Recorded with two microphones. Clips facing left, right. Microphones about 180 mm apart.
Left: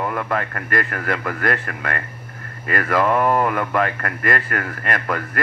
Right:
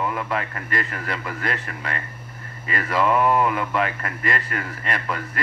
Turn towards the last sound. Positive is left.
turn(degrees=50)  # may be behind; listen again after turning